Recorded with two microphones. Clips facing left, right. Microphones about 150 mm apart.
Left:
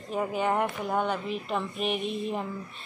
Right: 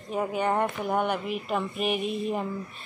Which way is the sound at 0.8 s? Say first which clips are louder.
Right 2 dB; 10° right (ahead or behind).